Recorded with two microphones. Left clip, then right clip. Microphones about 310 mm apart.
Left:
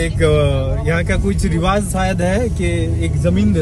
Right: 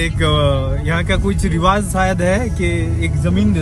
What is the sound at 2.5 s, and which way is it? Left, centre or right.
Speech, left.